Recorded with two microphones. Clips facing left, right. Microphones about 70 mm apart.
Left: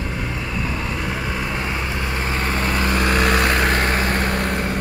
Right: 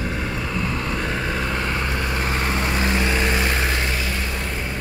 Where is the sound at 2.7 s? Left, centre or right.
Left.